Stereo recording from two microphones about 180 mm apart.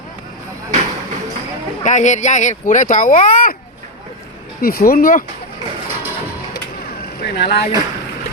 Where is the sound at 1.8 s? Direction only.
40° left (ahead or behind).